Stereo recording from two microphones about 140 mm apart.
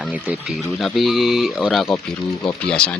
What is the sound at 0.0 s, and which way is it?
Speech, 5° right (ahead or behind).